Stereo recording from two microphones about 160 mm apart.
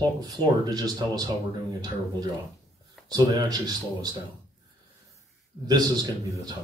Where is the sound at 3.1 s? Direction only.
25° right (ahead or behind).